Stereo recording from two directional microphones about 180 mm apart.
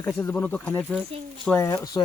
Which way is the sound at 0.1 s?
10° left (ahead or behind).